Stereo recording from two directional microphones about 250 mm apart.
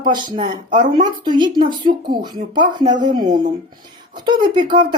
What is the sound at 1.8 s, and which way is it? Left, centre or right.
Speech, right.